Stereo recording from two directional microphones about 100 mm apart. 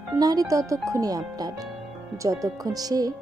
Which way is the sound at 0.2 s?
40° right (ahead or behind).